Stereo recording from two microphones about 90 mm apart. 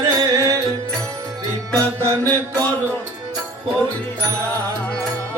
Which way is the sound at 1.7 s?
35° right (ahead or behind).